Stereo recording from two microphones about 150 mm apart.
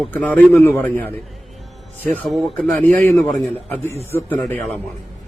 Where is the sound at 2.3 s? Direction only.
5° left (ahead or behind).